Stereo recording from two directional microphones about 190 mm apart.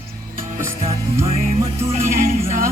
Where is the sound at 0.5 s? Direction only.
15° right (ahead or behind).